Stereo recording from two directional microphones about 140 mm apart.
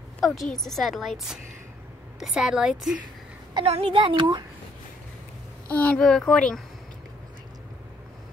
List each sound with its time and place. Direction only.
0.2 s a woman's voice: centre (ahead or behind)
3.5 s a woman's voice: 40° right (ahead or behind)
5.7 s a woman's voice: 10° left (ahead or behind)